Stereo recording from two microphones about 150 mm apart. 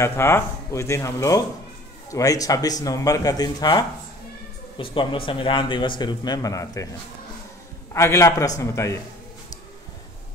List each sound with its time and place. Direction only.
0.0 s speech: 20° left (ahead or behind)
7.9 s speech: 20° left (ahead or behind)